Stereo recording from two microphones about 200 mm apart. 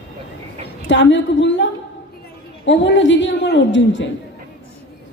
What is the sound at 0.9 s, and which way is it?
A man's voice, 65° left (ahead or behind).